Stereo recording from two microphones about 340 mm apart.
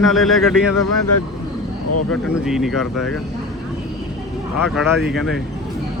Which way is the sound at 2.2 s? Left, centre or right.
Centre.